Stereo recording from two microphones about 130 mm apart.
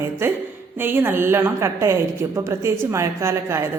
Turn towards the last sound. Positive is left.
turn(degrees=-20)  # may be behind; listen again after turning